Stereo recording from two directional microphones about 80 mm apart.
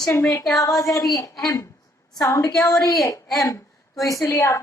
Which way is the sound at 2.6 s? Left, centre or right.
Left.